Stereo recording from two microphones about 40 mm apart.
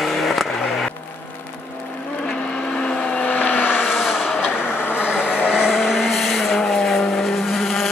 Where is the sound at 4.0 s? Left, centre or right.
Centre.